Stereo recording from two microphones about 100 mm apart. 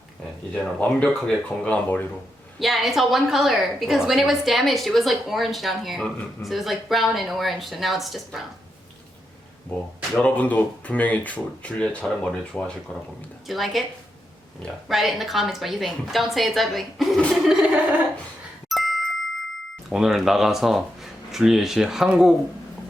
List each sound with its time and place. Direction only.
0.5 s speech: 10° left (ahead or behind)
2.6 s a woman's voice: centre (ahead or behind)
10.2 s speech: 15° left (ahead or behind)
13.5 s a woman's voice: centre (ahead or behind)
14.8 s a woman's voice: centre (ahead or behind)
18.7 s a sound: centre (ahead or behind)
19.9 s a woman's voice: 5° right (ahead or behind)